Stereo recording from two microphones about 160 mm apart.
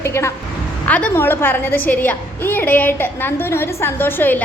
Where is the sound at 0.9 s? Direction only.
10° left (ahead or behind).